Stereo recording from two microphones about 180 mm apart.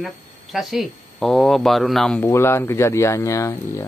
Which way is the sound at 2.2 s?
15° left (ahead or behind).